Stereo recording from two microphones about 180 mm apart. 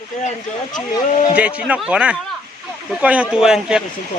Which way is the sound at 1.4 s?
5° right (ahead or behind).